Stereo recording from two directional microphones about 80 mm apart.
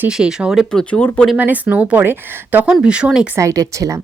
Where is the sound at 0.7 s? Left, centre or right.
Centre.